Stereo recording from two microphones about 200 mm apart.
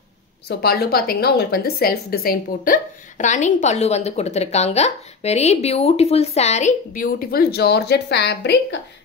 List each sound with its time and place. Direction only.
0.5 s a woman's voice: 50° left (ahead or behind)